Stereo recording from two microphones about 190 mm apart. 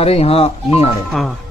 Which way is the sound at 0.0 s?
30° left (ahead or behind).